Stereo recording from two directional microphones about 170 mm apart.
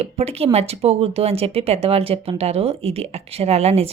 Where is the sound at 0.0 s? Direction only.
35° right (ahead or behind).